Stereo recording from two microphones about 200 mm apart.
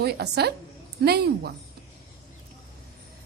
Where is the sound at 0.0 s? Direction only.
55° right (ahead or behind).